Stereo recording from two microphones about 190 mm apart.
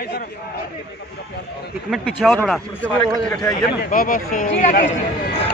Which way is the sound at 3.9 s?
45° left (ahead or behind).